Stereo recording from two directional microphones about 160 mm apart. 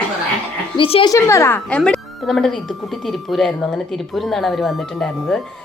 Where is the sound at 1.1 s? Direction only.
20° left (ahead or behind).